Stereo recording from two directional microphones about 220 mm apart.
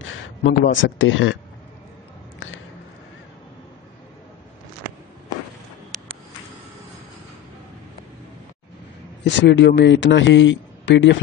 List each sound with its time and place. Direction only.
0.0 s speech: 60° left (ahead or behind)
9.2 s a man's voice: 55° left (ahead or behind)